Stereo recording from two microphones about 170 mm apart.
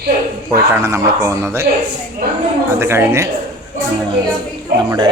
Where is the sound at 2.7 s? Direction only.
15° right (ahead or behind).